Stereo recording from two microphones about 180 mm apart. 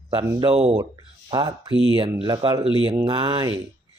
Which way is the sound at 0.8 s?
25° right (ahead or behind).